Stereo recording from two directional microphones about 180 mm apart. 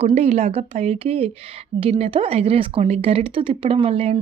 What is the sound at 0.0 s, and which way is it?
A woman's voice, 35° right (ahead or behind).